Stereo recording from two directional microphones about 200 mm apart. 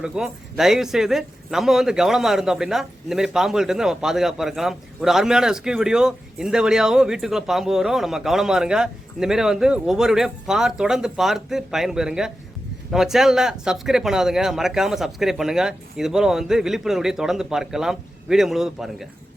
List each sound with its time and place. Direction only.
0.0 s a man's voice: centre (ahead or behind)